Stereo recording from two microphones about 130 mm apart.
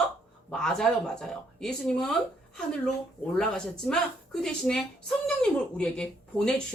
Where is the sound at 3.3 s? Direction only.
5° left (ahead or behind).